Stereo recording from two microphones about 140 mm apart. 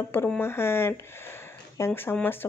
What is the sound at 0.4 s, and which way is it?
Speech, 15° left (ahead or behind).